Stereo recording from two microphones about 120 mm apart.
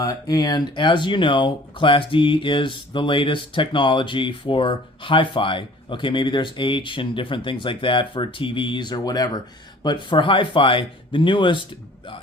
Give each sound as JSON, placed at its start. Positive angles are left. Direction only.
{"t": 0.0, "sound": "speech", "side_deg": 30}